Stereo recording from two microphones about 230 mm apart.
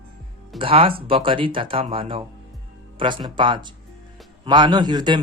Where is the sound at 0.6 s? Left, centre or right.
Right.